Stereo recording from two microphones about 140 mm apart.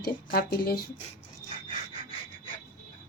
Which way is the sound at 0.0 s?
90° left.